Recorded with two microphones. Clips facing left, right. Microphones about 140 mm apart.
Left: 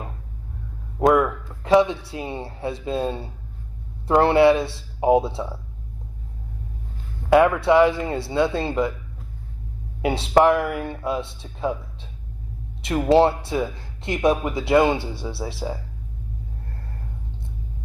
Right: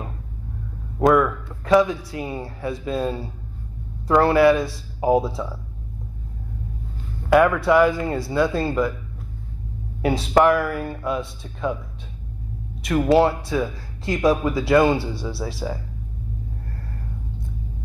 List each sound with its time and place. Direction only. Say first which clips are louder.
1.1 s speech: right 1 dB; 25° left (ahead or behind)
7.2 s speech: even; 25° left (ahead or behind)
10.0 s speech: even; 25° left (ahead or behind)
13.1 s speech: left 1 dB; 25° left (ahead or behind)